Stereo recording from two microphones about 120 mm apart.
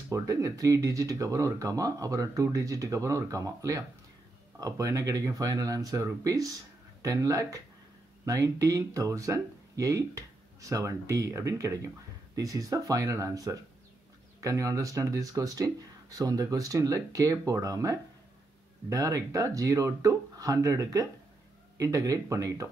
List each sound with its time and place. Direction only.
0.1 s speech: 30° right (ahead or behind)